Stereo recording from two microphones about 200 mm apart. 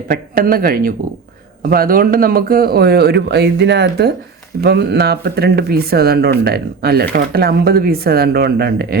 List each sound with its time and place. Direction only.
0.1 s speech: 45° right (ahead or behind)